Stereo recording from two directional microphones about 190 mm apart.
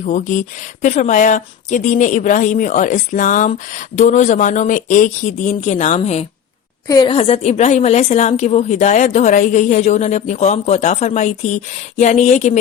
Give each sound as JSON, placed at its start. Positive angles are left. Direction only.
{"t": 0.0, "sound": "speech", "side_deg": 40}
{"t": 6.8, "sound": "a woman's voice", "side_deg": 20}
{"t": 7.1, "sound": "speech", "side_deg": 30}